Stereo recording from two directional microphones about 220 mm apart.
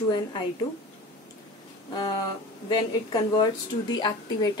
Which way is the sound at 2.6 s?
20° left (ahead or behind).